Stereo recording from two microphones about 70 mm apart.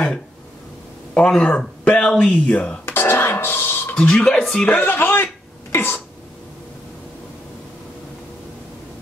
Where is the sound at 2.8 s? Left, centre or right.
Left.